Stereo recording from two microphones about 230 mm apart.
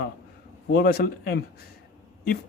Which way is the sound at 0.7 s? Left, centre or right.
Left.